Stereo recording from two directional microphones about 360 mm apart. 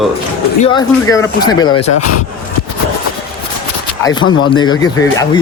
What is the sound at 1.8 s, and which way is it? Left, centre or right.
Speech, left.